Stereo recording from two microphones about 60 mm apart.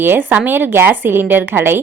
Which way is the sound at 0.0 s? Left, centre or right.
Right.